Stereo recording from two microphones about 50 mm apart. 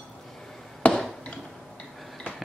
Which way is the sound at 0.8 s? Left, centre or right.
Left.